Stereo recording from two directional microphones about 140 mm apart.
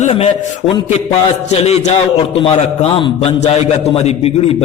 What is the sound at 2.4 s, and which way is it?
A man's voice, 40° left (ahead or behind).